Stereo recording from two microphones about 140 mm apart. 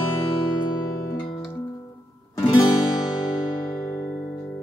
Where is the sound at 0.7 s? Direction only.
20° left (ahead or behind).